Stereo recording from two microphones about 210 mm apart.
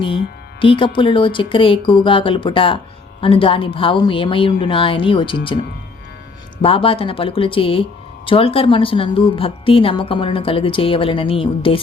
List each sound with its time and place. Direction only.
0.6 s speech: 25° left (ahead or behind)
6.6 s speech: 25° left (ahead or behind)